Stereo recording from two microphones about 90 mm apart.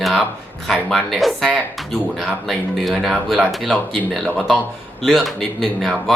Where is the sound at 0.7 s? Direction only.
Centre (ahead or behind).